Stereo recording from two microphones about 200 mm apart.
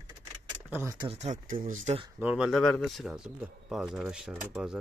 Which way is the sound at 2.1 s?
5° right (ahead or behind).